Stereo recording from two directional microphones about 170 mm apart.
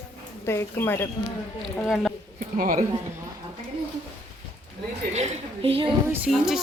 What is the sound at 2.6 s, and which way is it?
Speech, 60° right (ahead or behind).